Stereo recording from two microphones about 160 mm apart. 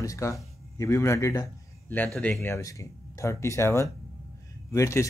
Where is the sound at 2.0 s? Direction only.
Centre (ahead or behind).